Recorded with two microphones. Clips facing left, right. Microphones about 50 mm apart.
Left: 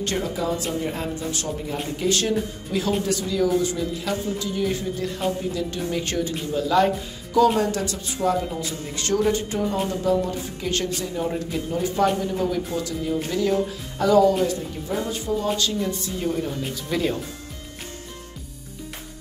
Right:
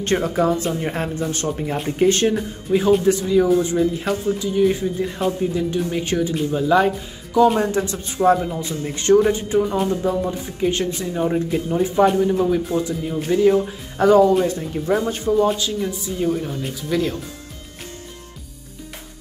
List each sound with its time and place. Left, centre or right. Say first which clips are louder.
0.0 s speech: right 6 dB; right
4.4 s speech: right 7 dB; centre
13.9 s speech: right 4 dB; right
15.4 s speech: right 4 dB; centre